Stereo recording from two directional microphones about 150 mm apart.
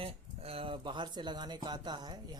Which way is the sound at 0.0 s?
40° right (ahead or behind).